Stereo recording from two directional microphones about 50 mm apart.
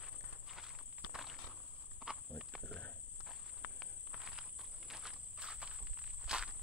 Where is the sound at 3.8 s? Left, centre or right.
Centre.